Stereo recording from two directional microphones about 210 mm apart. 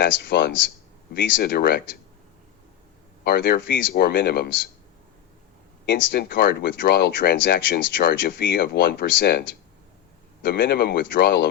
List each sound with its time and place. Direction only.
0.0 s speech: 55° left (ahead or behind)
3.2 s speech: 50° left (ahead or behind)
5.8 s speech: 55° left (ahead or behind)
10.4 s speech: 50° left (ahead or behind)